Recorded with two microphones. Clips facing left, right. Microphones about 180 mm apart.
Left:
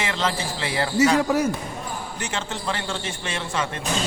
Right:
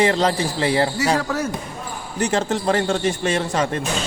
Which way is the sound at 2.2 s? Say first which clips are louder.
Right 13 dB; 40° right (ahead or behind).